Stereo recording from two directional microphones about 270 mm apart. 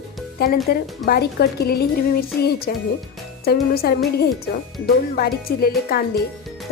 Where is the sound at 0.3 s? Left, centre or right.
Left.